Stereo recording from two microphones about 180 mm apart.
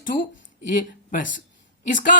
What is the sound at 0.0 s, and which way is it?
Speech, 50° left (ahead or behind).